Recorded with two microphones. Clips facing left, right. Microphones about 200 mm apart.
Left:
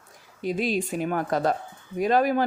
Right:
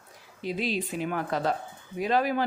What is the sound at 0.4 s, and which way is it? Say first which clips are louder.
Speech: left 4 dB; 45° left (ahead or behind).